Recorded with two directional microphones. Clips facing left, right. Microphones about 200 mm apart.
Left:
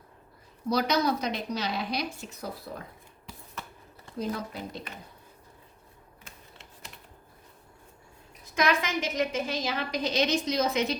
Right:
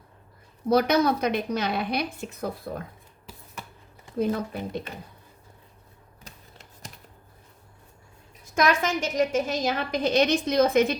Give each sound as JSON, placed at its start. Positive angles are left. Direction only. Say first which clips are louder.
{"t": 0.7, "sound": "a woman's voice", "louder": "right 5 dB", "side_deg": -55}
{"t": 4.2, "sound": "a woman's voice", "louder": "right 6 dB", "side_deg": -55}
{"t": 8.5, "sound": "a woman's voice", "louder": "right 3 dB", "side_deg": -50}